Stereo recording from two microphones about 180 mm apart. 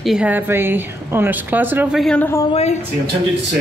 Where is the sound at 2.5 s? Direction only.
35° left (ahead or behind).